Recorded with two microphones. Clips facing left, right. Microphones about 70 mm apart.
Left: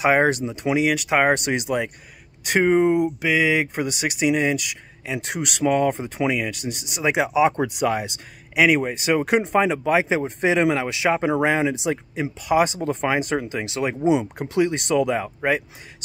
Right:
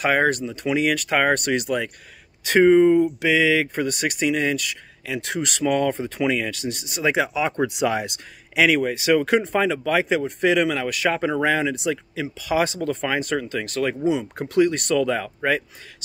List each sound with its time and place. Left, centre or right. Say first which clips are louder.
0.0 s speech: left 2 dB; centre
7.6 s speech: even; centre
8.7 s speech: right 2 dB; centre
12.4 s speech: left 2 dB; centre